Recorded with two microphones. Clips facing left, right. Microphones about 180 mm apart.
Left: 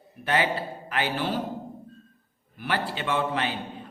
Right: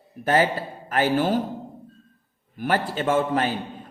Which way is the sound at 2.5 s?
45° right (ahead or behind).